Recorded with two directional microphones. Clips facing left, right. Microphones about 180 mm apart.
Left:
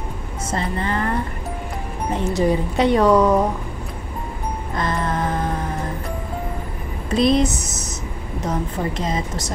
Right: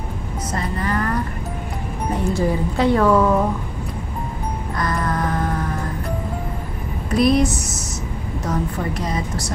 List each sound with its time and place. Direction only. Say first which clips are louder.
0.5 s a woman's voice: left 1 dB; 25° left (ahead or behind)
2.1 s speech: left 2 dB; 20° left (ahead or behind)
4.7 s music: even; 25° left (ahead or behind)
7.2 s a woman's voice: even; 20° left (ahead or behind)